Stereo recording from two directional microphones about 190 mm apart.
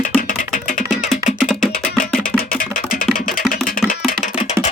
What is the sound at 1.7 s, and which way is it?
Music, 45° left (ahead or behind).